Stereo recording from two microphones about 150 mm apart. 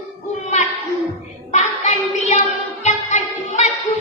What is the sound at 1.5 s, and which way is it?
Child singing, 50° left (ahead or behind).